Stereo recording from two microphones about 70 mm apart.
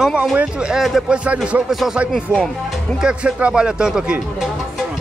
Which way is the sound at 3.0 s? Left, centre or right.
Centre.